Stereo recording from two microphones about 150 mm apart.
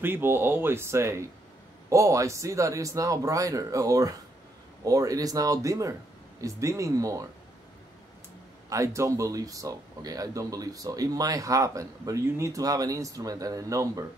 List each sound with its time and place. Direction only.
0.0 s speech: 15° right (ahead or behind)
8.6 s speech: 20° right (ahead or behind)